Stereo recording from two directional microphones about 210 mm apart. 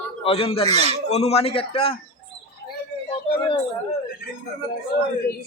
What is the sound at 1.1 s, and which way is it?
Speech, 30° left (ahead or behind).